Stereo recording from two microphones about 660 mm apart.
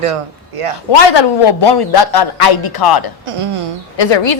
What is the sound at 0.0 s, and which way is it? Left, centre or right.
Speech, right.